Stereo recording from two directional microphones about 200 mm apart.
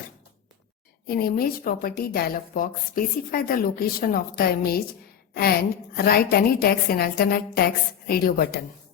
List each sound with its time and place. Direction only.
1.0 s a woman's voice: 50° left (ahead or behind)